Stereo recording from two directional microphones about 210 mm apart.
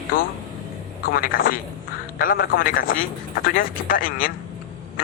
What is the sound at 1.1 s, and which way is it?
A man's voice, 45° left (ahead or behind).